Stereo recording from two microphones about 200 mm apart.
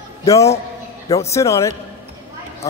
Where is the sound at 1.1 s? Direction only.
15° left (ahead or behind).